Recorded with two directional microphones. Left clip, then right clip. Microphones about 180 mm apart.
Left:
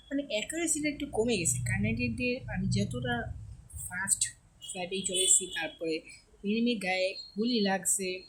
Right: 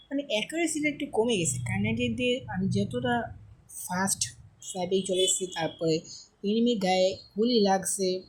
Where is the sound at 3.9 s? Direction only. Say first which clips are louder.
Right 4 dB; 20° right (ahead or behind).